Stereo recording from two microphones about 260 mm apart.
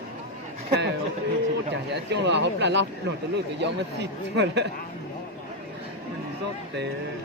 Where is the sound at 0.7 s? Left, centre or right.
Right.